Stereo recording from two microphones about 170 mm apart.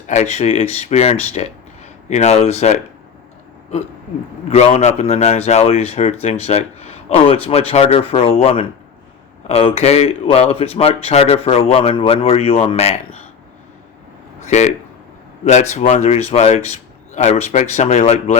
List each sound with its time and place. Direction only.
0.1 s speech: 40° left (ahead or behind)
4.4 s speech: 35° left (ahead or behind)
14.4 s speech: 40° left (ahead or behind)